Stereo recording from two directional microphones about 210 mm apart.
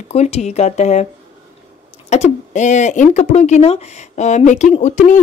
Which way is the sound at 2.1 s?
35° left (ahead or behind).